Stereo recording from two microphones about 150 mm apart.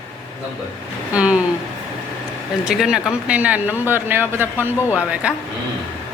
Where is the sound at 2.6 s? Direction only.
5° right (ahead or behind).